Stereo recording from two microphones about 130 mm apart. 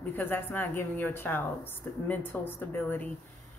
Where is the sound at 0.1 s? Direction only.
15° left (ahead or behind).